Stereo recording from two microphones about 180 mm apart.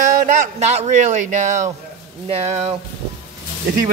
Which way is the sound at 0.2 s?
40° right (ahead or behind).